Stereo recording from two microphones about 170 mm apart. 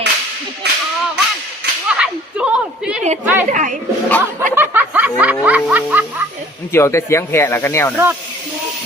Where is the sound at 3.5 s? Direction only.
50° right (ahead or behind).